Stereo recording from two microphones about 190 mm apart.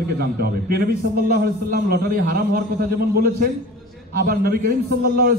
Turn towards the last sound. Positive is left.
turn(degrees=-50)  # may be behind; listen again after turning